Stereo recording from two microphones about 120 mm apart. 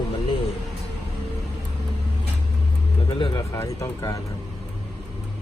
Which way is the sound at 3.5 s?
25° left (ahead or behind).